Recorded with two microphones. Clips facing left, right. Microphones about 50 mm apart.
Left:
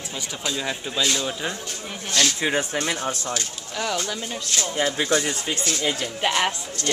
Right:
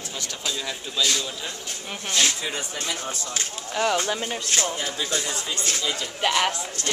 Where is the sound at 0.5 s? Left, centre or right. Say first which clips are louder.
Left 4 dB; centre.